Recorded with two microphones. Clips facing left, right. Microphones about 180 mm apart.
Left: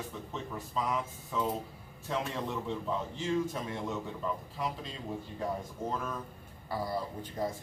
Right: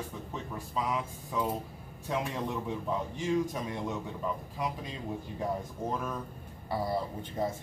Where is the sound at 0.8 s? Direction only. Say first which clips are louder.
Right 1 dB; 5° right (ahead or behind).